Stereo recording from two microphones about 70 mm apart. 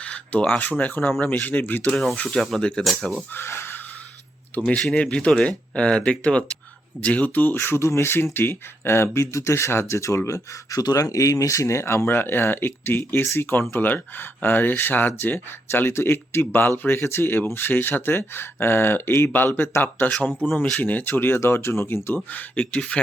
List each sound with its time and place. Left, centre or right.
0.0 s a sound: centre
0.6 s speech: left
2.2 s speech: centre
3.3 s speech: left
4.5 s speech: centre
7.5 s speech: left
10.8 s speech: left
22.3 s speech: left